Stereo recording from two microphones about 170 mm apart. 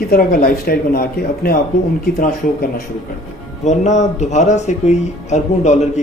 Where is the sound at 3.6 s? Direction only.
45° left (ahead or behind).